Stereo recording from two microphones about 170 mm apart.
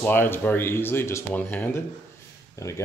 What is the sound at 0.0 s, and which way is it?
Speech, 10° left (ahead or behind).